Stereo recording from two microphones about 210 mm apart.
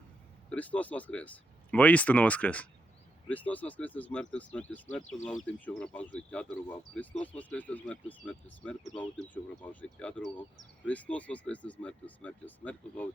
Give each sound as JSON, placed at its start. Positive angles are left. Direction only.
{"t": 0.5, "sound": "speech", "side_deg": 5}